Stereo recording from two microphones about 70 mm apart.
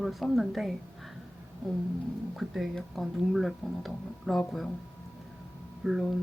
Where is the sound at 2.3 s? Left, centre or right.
Centre.